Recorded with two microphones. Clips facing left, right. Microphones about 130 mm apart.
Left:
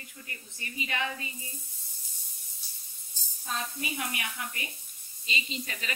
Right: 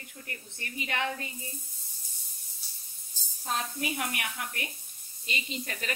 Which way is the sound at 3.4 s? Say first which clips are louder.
Right 3 dB; 70° right (ahead or behind).